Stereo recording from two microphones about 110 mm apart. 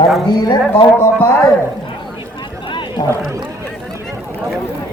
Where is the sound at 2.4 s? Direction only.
45° left (ahead or behind).